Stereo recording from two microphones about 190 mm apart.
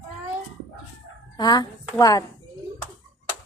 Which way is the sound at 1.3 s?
20° left (ahead or behind).